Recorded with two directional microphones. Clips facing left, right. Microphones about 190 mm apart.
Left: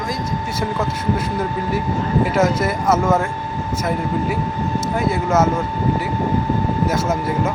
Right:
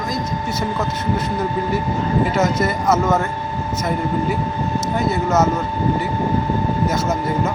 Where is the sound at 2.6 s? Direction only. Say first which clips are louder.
Even; 5° left (ahead or behind).